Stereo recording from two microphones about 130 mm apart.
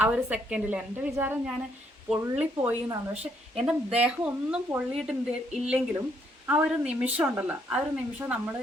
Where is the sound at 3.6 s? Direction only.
10° right (ahead or behind).